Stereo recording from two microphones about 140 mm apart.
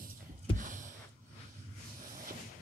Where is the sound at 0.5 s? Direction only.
65° right (ahead or behind).